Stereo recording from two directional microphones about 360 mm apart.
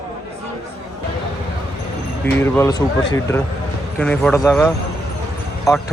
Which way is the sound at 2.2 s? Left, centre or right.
Centre.